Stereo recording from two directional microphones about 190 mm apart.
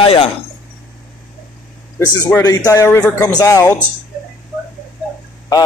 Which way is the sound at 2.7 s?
15° left (ahead or behind).